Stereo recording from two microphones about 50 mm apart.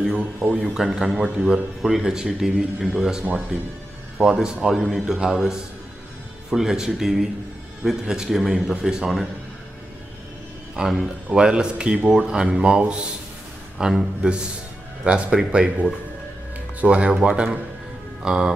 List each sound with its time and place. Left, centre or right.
0.5 s speech: centre
0.8 s speech: centre
4.2 s speech: centre
10.8 s speech: centre